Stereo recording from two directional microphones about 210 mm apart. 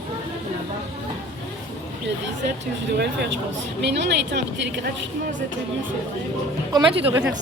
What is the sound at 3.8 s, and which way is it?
Speech, 55° right (ahead or behind).